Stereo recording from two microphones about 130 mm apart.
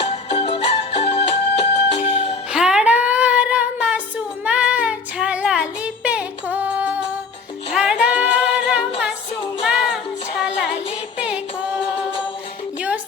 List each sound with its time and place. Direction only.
0.0 s music: 50° left (ahead or behind)
2.5 s music: 5° right (ahead or behind)
4.4 s child singing: 10° right (ahead or behind)
7.7 s music: 5° right (ahead or behind)